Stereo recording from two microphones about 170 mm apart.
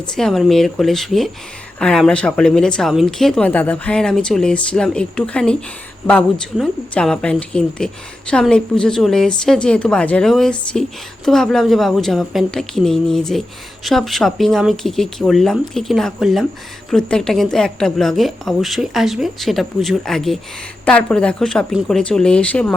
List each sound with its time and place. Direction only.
0.2 s speech: centre (ahead or behind)